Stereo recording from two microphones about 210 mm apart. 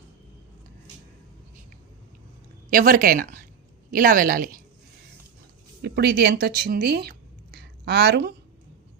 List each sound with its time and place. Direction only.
2.6 s a woman's voice: 40° right (ahead or behind)
5.8 s speech: 50° right (ahead or behind)